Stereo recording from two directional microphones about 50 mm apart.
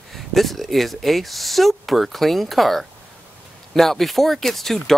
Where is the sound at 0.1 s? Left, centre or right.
Centre.